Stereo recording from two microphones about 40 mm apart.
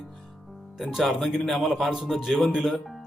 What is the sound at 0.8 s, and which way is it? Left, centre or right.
Speech, centre.